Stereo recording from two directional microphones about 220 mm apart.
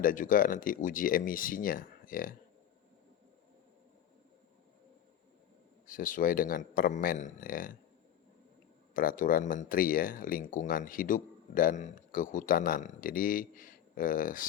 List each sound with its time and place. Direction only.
0.0 s speech: 40° left (ahead or behind)
5.8 s speech: 40° left (ahead or behind)
9.0 s speech: 40° left (ahead or behind)